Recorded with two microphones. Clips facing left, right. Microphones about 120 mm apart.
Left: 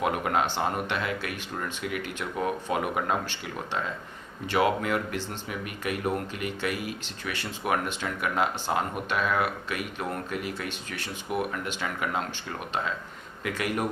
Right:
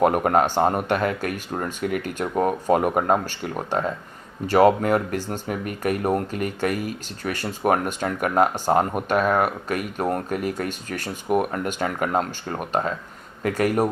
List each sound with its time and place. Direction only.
0.0 s speech: 45° right (ahead or behind)